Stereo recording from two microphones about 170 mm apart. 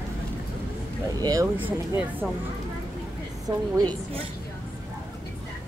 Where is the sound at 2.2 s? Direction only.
5° right (ahead or behind).